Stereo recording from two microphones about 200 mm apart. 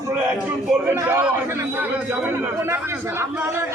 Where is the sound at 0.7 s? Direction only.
10° right (ahead or behind).